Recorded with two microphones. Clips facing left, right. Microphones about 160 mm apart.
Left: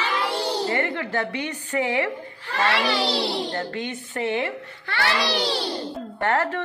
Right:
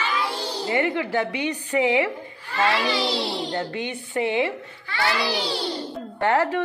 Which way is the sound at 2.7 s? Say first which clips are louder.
Left 1 dB; 75° left (ahead or behind).